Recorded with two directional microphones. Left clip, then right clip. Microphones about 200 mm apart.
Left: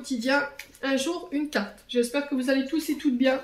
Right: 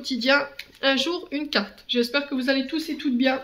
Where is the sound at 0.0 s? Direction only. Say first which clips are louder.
Right 4 dB; 30° right (ahead or behind).